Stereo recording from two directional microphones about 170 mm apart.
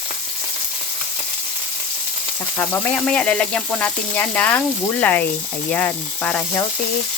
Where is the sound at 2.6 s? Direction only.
10° left (ahead or behind).